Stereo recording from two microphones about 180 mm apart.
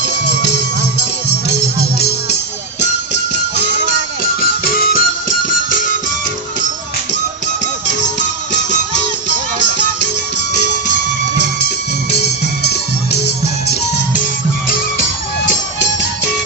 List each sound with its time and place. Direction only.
4.6 s music: 55° left (ahead or behind)
12.6 s music: 65° left (ahead or behind)